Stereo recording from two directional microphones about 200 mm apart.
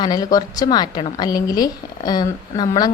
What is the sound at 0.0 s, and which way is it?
A woman's voice, 20° left (ahead or behind).